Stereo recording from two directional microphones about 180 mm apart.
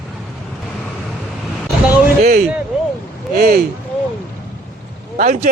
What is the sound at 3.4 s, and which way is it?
Speech, 60° right (ahead or behind).